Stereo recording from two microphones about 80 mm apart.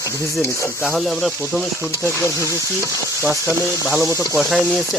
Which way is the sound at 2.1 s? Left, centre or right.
Left.